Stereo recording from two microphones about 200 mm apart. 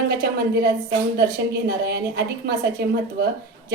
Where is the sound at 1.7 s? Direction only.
50° right (ahead or behind).